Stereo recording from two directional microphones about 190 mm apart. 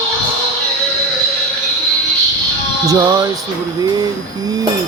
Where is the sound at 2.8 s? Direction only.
20° right (ahead or behind).